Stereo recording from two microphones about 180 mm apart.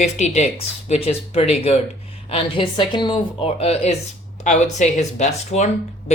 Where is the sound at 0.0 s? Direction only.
40° left (ahead or behind).